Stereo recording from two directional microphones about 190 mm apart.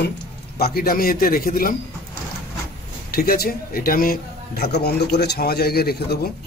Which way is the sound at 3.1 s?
55° left (ahead or behind).